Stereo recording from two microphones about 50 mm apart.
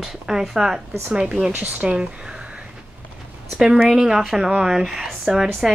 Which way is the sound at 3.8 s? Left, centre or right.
Centre.